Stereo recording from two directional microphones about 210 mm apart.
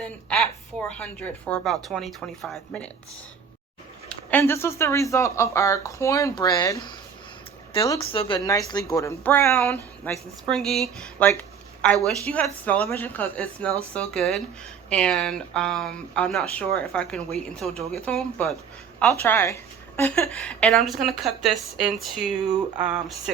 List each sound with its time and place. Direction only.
0.0 s a woman's voice: 5° left (ahead or behind)
4.3 s a woman's voice: 10° left (ahead or behind)